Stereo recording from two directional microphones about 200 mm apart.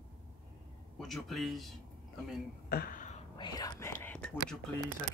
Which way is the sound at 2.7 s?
45° left (ahead or behind).